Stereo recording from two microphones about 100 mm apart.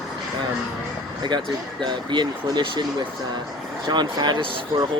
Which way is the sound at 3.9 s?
45° right (ahead or behind).